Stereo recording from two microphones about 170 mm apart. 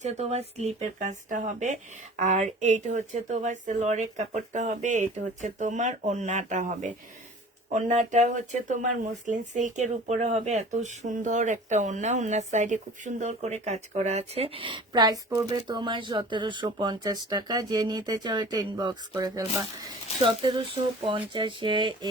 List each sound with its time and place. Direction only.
0.0 s speech: 40° right (ahead or behind)